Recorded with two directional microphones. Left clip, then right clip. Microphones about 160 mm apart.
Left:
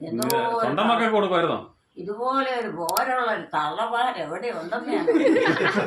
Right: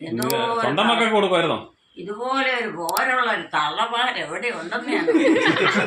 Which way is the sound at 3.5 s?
15° left (ahead or behind).